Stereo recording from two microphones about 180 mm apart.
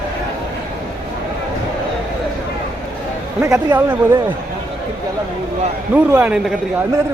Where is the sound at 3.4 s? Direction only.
15° right (ahead or behind).